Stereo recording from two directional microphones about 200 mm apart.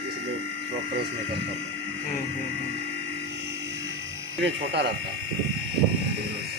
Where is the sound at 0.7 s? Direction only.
55° right (ahead or behind).